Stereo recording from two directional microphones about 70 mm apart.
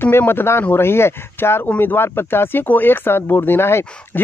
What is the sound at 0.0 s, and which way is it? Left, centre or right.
Speech, left.